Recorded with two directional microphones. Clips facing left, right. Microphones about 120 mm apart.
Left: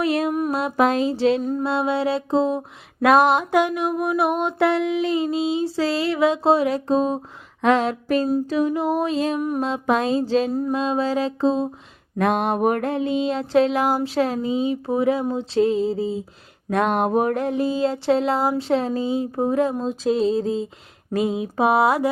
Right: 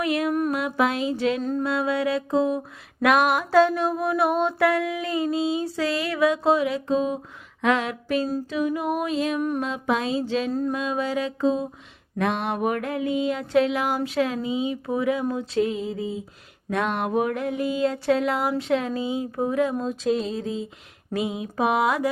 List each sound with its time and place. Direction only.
0.0 s music: 35° left (ahead or behind)
0.5 s mantra: 35° left (ahead or behind)
1.4 s music: 10° left (ahead or behind)
1.6 s mantra: 30° left (ahead or behind)
12.1 s mantra: 40° left (ahead or behind)
21.1 s speech: 40° left (ahead or behind)
21.3 s mantra: 30° left (ahead or behind)